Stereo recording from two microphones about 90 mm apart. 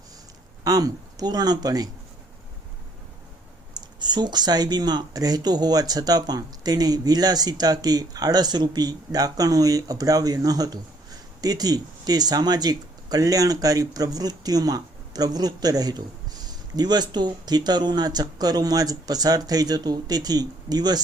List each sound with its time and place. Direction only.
0.6 s speech: 45° right (ahead or behind)
3.8 s speech: 55° right (ahead or behind)